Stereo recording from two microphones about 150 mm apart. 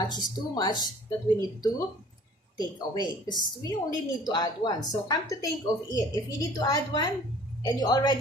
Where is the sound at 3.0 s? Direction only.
25° left (ahead or behind).